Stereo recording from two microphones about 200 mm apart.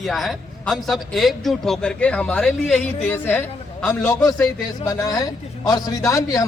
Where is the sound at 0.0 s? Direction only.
Centre (ahead or behind).